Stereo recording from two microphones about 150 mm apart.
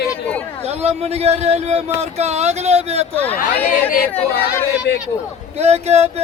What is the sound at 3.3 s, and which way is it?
Speech, 70° left (ahead or behind).